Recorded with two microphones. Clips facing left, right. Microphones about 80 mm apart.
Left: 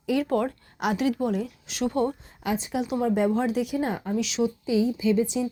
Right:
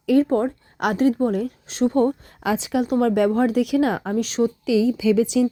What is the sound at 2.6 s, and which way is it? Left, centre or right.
Speech, right.